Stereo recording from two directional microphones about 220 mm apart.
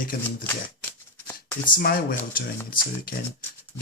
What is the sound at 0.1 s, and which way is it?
Speech, 40° left (ahead or behind).